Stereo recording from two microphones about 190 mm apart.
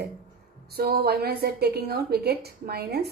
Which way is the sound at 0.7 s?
55° right (ahead or behind).